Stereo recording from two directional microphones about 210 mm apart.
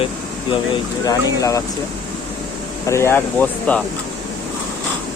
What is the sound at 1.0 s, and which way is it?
Speech, 15° left (ahead or behind).